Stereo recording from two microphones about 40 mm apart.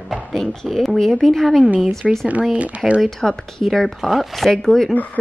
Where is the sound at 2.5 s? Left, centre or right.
Right.